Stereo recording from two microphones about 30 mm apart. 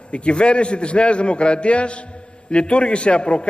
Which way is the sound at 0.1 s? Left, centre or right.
Left.